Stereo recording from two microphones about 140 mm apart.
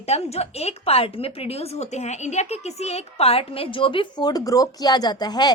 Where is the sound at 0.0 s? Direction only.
50° left (ahead or behind).